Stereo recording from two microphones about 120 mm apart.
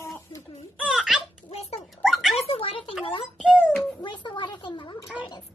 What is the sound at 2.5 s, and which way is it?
Speech, 50° left (ahead or behind).